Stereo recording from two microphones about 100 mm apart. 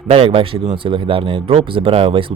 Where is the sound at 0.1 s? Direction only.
65° right (ahead or behind).